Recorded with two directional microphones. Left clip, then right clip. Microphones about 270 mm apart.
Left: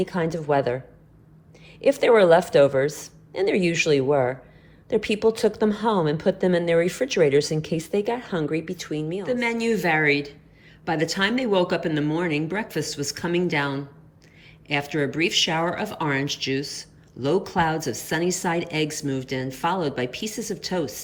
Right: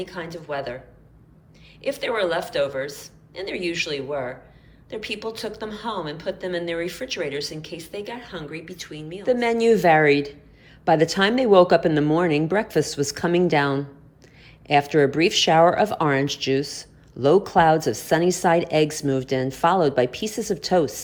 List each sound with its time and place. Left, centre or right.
0.0 s a woman's voice: centre
1.8 s a woman's voice: centre
9.2 s speech: centre